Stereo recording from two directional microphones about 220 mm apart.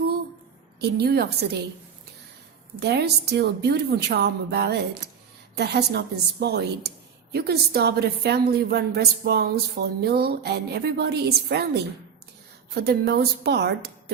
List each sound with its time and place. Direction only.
0.8 s a woman's voice: 45° right (ahead or behind)
2.8 s a woman's voice: 50° right (ahead or behind)